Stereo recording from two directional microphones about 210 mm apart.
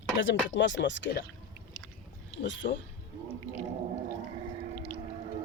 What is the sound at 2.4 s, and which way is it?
Speech, 60° left (ahead or behind).